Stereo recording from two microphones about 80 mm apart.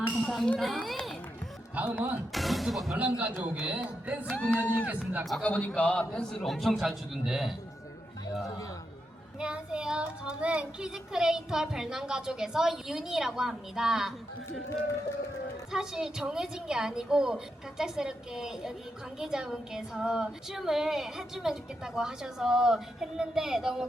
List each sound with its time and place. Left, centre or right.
0.1 s a man's voice: centre
1.7 s a man's voice: right
2.3 s music: centre
3.2 s a man's voice: right
4.3 s a man's voice: centre
6.4 s a man's voice: centre
9.4 s speech: centre
15.7 s speech: centre